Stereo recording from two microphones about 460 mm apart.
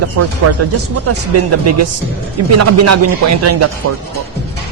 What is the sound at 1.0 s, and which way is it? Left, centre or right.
Speech, right.